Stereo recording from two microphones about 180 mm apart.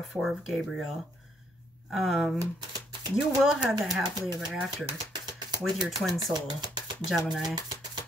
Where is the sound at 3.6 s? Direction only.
5° right (ahead or behind).